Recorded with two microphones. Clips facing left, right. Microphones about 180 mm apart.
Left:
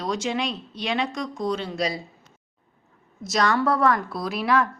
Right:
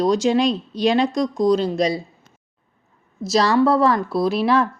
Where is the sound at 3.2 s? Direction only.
30° right (ahead or behind).